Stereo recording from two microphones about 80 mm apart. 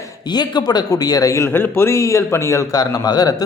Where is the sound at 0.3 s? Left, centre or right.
Left.